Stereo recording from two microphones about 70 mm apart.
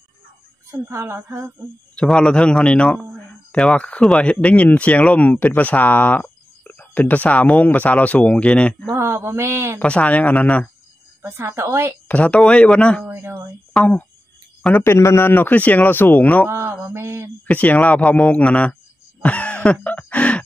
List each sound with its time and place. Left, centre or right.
0.9 s a man's voice: right
2.0 s speech: centre
8.9 s a man's voice: right
9.8 s speech: centre
11.2 s a man's voice: right
12.1 s speech: centre
13.0 s a man's voice: right
13.7 s speech: centre
14.8 s speech: left
16.4 s a man's voice: right
17.5 s speech: left
19.2 s a sound: centre